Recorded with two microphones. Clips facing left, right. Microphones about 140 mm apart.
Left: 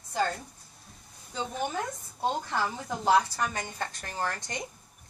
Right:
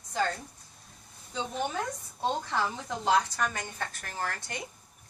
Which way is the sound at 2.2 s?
5° left (ahead or behind).